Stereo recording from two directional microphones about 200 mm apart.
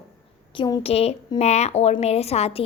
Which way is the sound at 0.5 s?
25° left (ahead or behind).